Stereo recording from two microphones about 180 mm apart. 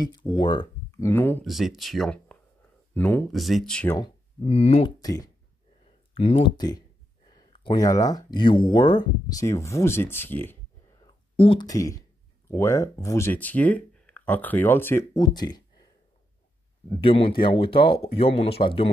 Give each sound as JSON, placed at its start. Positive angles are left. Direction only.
{"t": 0.0, "sound": "speech", "side_deg": 25}
{"t": 1.5, "sound": "speech", "side_deg": 0}
{"t": 3.3, "sound": "speech", "side_deg": 0}
{"t": 4.4, "sound": "speech", "side_deg": 35}
{"t": 5.0, "sound": "speech", "side_deg": 20}
{"t": 6.1, "sound": "speech", "side_deg": 30}
{"t": 11.4, "sound": "speech", "side_deg": 25}
{"t": 15.1, "sound": "speech", "side_deg": 25}
{"t": 17.0, "sound": "speech", "side_deg": 30}